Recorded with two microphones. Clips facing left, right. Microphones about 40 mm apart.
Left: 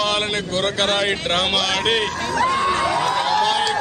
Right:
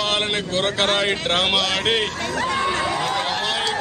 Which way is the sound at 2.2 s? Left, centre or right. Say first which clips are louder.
Left 4 dB; left.